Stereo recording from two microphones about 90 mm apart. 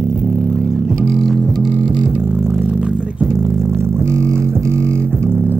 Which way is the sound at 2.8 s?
15° right (ahead or behind).